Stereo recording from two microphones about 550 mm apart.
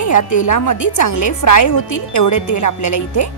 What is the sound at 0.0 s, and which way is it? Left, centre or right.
A woman's voice, left.